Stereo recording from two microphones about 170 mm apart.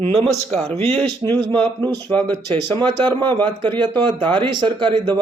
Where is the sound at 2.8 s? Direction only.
30° right (ahead or behind).